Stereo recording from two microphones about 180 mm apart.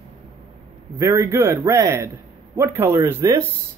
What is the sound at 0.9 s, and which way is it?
Speech, 15° right (ahead or behind).